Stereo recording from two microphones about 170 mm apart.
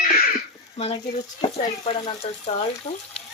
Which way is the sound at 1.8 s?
35° left (ahead or behind).